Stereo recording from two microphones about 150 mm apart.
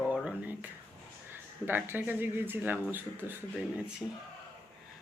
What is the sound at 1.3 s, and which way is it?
A woman's voice, 15° right (ahead or behind).